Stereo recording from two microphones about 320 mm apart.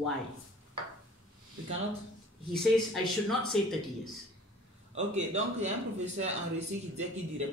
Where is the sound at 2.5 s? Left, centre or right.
Centre.